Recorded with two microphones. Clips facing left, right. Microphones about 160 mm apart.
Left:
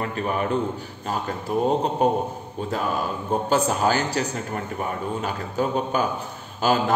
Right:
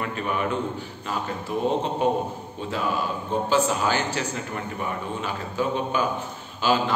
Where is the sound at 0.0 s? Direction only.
40° left (ahead or behind).